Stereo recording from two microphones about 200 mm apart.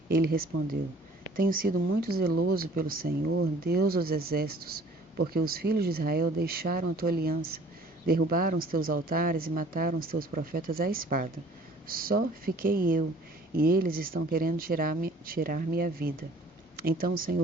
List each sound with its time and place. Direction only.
0.1 s speech: 50° right (ahead or behind)